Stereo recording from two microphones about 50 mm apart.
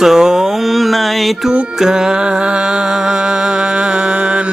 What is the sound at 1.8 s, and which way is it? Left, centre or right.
Music, centre.